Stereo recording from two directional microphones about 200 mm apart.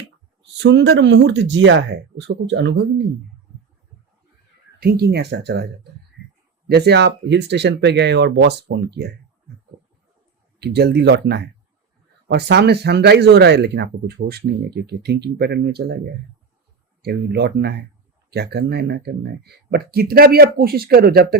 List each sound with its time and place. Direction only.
0.5 s speech: 60° right (ahead or behind)
4.8 s speech: 50° right (ahead or behind)
10.6 s speech: 55° right (ahead or behind)
17.0 s speech: 55° right (ahead or behind)